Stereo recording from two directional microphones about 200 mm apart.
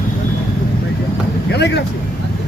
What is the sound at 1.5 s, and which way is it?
Speech, 60° left (ahead or behind).